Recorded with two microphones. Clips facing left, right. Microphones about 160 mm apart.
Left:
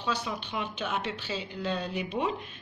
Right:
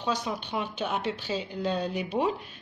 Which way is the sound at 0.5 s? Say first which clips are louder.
Right 3 dB; 40° right (ahead or behind).